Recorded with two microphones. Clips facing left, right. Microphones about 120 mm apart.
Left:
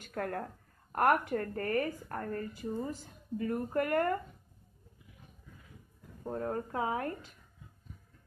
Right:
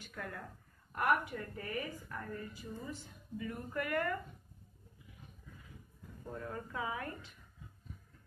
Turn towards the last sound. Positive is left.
turn(degrees=45)  # may be behind; listen again after turning